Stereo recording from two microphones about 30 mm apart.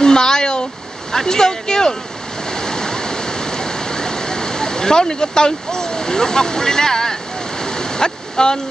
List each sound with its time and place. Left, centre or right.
0.0 s a sound: left
1.1 s speech: centre
2.4 s waterfall: left